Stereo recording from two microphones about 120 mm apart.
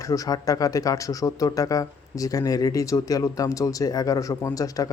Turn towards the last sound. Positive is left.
turn(degrees=30)  # may be behind; listen again after turning